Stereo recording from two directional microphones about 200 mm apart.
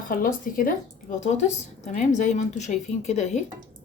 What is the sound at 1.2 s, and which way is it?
A woman's voice, 35° left (ahead or behind).